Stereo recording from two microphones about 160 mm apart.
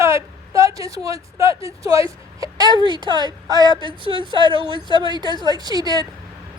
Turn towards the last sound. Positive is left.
turn(degrees=-25)  # may be behind; listen again after turning